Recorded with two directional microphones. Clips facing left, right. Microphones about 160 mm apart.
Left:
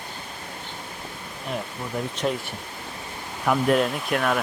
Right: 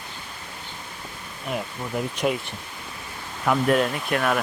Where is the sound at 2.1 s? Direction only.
10° right (ahead or behind).